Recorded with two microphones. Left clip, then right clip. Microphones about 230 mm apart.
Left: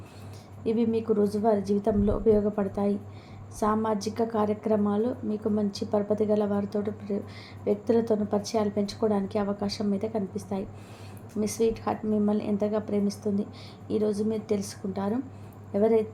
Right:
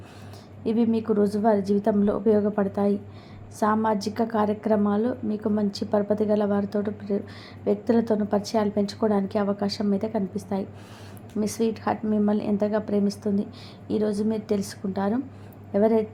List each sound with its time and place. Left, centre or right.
0.6 s a woman's voice: centre